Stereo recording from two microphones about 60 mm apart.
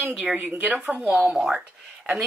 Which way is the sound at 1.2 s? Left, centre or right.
Centre.